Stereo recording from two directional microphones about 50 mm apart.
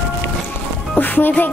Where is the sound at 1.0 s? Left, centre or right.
Left.